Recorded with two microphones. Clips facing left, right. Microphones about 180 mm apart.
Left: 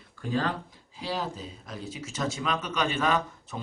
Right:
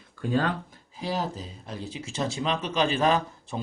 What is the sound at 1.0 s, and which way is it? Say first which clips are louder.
Speech: right 3 dB; 45° right (ahead or behind).